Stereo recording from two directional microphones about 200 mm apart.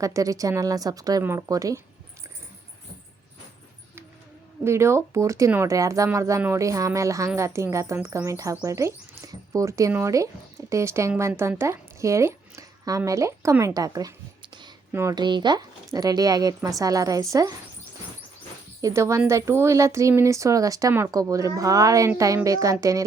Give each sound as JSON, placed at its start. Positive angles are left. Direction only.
{"t": 0.0, "sound": "speech", "side_deg": -15}
{"t": 4.6, "sound": "speech", "side_deg": -15}
{"t": 18.8, "sound": "speech", "side_deg": -15}